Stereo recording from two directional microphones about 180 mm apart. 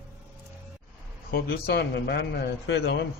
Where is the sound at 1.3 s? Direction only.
65° left (ahead or behind).